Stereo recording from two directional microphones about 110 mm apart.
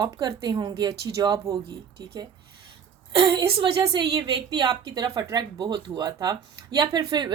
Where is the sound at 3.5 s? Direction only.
45° right (ahead or behind).